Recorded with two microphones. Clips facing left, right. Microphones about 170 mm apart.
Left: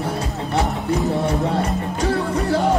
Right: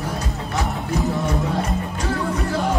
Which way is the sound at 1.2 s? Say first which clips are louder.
Left 3 dB; 35° left (ahead or behind).